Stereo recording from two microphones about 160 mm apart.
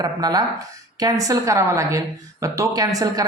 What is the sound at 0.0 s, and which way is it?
A woman's voice, 25° right (ahead or behind).